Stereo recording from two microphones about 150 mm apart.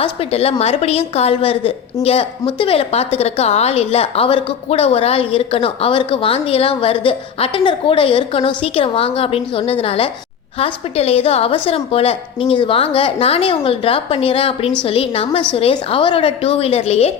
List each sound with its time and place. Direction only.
0.0 s a woman's voice: 40° left (ahead or behind)